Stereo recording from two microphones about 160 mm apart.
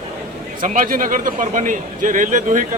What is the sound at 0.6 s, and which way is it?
A man's voice, 55° right (ahead or behind).